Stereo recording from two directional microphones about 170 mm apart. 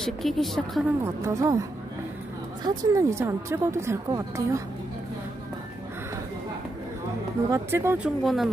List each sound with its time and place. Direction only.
0.0 s a woman's voice: centre (ahead or behind)
1.0 s a woman's voice: 15° right (ahead or behind)
7.5 s a woman's voice: 15° right (ahead or behind)
8.2 s a woman's voice: centre (ahead or behind)